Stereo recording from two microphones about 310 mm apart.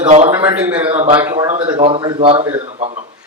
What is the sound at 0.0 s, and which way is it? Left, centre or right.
Speech, right.